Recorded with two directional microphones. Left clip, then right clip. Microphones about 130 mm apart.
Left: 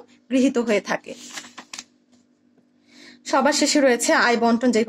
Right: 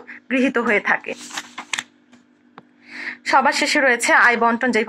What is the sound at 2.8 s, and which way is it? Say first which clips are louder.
A woman's voice: right 12 dB; 50° left (ahead or behind).